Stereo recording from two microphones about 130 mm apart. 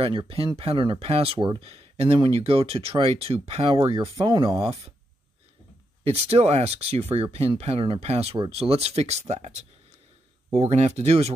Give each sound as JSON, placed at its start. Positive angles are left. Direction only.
{"t": 0.0, "sound": "speech", "side_deg": -40}
{"t": 6.0, "sound": "speech", "side_deg": -55}